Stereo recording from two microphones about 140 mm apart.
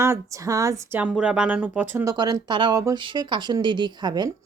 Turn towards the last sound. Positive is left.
turn(degrees=-30)  # may be behind; listen again after turning